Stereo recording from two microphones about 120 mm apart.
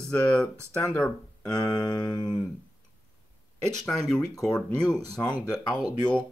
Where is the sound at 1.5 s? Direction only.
30° left (ahead or behind).